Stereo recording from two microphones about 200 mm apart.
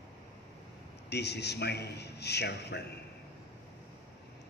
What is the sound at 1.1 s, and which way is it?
A man's voice, 55° left (ahead or behind).